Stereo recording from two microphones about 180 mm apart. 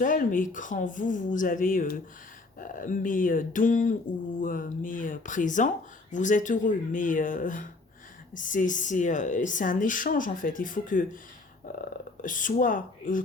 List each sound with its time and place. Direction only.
0.0 s speech: 50° left (ahead or behind)
12.2 s speech: 45° left (ahead or behind)